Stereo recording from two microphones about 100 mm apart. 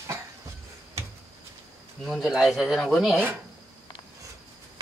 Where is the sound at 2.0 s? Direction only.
Centre (ahead or behind).